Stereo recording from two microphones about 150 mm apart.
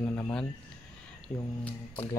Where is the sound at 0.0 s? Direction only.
15° left (ahead or behind).